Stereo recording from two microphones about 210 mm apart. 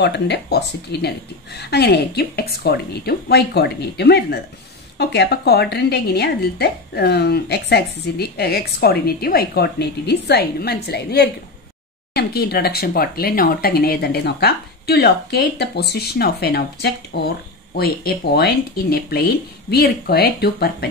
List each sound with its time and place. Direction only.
0.0 s a woman's voice: 55° left (ahead or behind)